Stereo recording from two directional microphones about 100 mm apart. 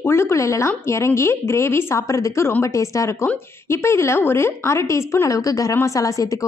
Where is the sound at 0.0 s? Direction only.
25° left (ahead or behind).